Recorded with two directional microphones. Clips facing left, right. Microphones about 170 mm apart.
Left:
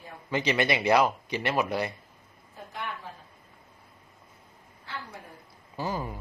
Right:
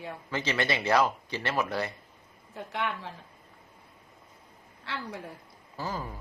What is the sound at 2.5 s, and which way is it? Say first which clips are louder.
Speech: right 5 dB; 75° right (ahead or behind).